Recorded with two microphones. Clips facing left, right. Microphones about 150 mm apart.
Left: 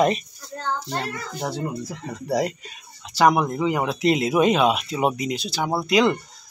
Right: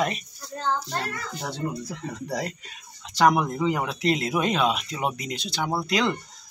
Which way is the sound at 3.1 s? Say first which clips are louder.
Left 2 dB; 5° left (ahead or behind).